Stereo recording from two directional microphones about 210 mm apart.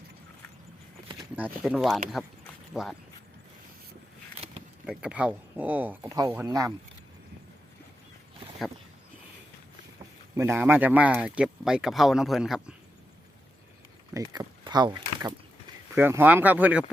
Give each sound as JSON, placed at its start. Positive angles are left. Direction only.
{"t": 1.4, "sound": "speech", "side_deg": -5}
{"t": 4.9, "sound": "speech", "side_deg": -5}
{"t": 10.3, "sound": "speech", "side_deg": -10}
{"t": 14.1, "sound": "speech", "side_deg": -20}
{"t": 16.0, "sound": "speech", "side_deg": -10}